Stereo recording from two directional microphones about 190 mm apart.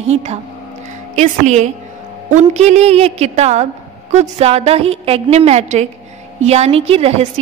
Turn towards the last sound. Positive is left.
turn(degrees=-35)  # may be behind; listen again after turning